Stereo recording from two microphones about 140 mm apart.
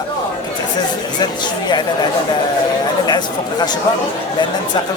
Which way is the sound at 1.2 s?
30° left (ahead or behind).